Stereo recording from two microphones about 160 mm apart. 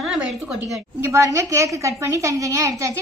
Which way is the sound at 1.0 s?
20° right (ahead or behind).